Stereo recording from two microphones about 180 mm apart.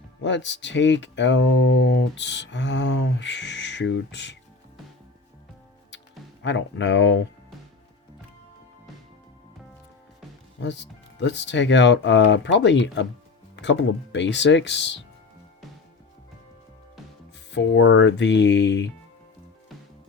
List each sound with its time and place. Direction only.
0.2 s speech: 80° left
6.4 s speech: 90° left
10.6 s speech: 75° left (ahead or behind)
17.5 s speech: 80° left